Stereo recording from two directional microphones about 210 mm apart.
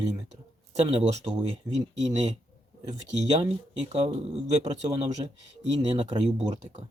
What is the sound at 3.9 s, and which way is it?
Speech, 30° right (ahead or behind).